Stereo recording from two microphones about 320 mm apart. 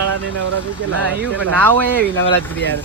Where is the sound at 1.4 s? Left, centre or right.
Centre.